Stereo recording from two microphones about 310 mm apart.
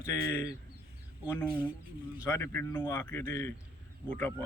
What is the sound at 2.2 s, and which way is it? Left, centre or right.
Speech, centre.